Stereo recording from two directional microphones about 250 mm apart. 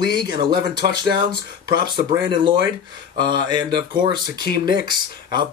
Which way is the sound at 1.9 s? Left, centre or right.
Centre.